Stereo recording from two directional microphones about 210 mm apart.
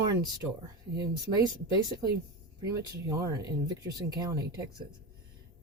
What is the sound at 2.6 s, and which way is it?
A woman's voice, 15° right (ahead or behind).